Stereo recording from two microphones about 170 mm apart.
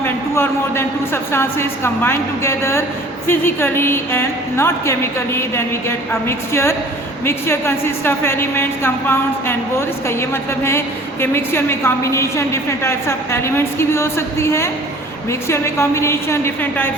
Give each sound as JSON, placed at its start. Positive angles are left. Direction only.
{"t": 0.0, "sound": "a woman's voice", "side_deg": 15}